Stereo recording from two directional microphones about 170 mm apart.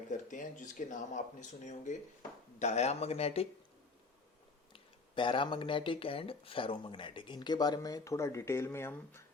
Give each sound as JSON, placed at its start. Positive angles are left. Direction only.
{"t": 0.1, "sound": "speech", "side_deg": 50}
{"t": 4.7, "sound": "speech", "side_deg": 30}